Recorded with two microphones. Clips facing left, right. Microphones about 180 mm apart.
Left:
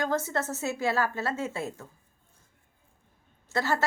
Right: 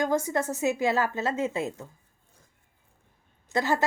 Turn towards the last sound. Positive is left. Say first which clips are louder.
# right 2 dB
turn(degrees=-15)  # may be behind; listen again after turning